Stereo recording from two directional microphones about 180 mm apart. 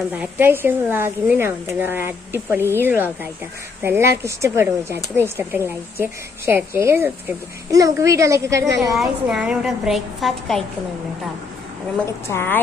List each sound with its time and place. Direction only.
0.1 s speech: 10° right (ahead or behind)
8.9 s a woman's voice: 5° right (ahead or behind)
12.3 s a woman's voice: 10° left (ahead or behind)